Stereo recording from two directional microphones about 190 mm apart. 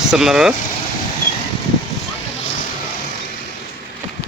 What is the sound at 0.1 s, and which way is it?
Speech, 5° right (ahead or behind).